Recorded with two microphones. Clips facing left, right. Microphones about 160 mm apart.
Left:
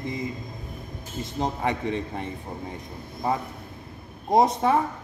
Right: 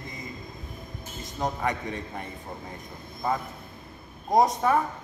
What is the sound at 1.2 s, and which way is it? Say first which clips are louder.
A man's voice: left 2 dB; 25° left (ahead or behind).